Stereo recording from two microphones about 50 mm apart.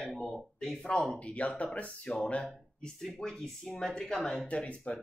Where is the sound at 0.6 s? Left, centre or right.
Centre.